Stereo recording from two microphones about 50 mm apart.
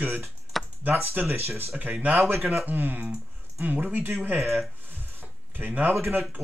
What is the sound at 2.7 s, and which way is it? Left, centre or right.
Speech, right.